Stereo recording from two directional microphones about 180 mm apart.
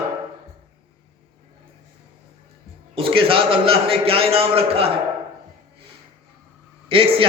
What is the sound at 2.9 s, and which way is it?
A man's voice, 30° right (ahead or behind).